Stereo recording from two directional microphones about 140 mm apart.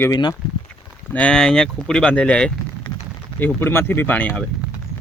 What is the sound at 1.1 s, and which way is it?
Speech, 5° left (ahead or behind).